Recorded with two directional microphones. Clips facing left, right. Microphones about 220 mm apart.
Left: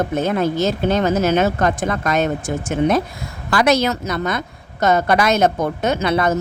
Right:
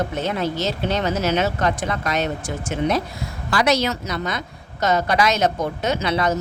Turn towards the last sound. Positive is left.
turn(degrees=50)  # may be behind; listen again after turning